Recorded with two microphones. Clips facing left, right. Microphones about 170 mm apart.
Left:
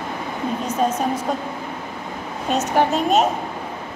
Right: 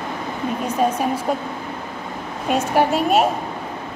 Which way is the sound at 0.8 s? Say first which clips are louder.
Right 1 dB; 10° right (ahead or behind).